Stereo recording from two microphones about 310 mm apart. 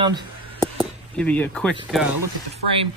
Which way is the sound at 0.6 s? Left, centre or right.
Centre.